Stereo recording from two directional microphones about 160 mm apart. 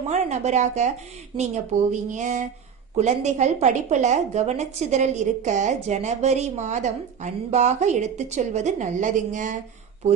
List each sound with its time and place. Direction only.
0.1 s a woman's voice: 45° right (ahead or behind)